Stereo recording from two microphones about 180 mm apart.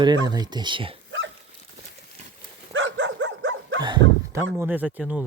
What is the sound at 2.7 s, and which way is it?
Dog, 90° right.